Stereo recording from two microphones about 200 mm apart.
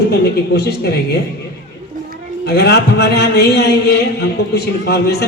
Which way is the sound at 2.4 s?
55° left (ahead or behind).